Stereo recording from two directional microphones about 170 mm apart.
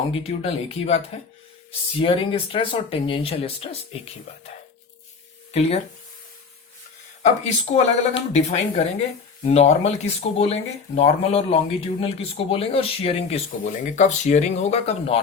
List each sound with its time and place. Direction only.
0.1 s speech: 35° left (ahead or behind)
7.2 s speech: 45° left (ahead or behind)